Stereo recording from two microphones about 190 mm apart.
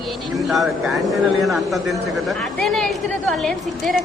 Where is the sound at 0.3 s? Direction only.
Centre (ahead or behind).